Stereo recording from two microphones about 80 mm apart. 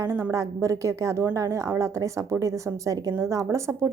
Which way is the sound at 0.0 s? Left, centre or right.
Right.